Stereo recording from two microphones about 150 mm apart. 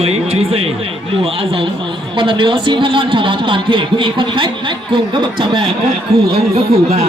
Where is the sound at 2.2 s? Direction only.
35° right (ahead or behind).